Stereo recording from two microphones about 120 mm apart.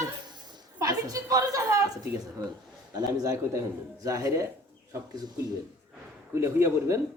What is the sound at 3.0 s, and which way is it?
Speech, 30° right (ahead or behind).